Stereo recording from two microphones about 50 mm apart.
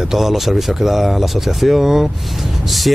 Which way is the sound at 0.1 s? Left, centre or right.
Centre.